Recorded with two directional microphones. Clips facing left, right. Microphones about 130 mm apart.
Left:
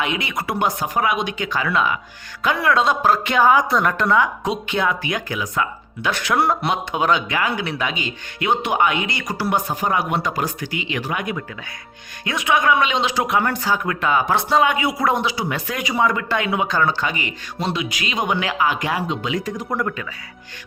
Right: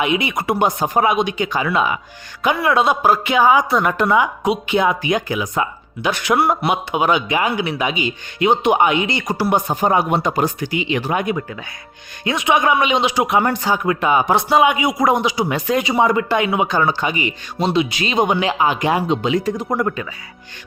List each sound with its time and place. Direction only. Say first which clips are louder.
0.0 s speech: right 5 dB; 15° right (ahead or behind)
19.7 s speech: right 2 dB; 15° right (ahead or behind)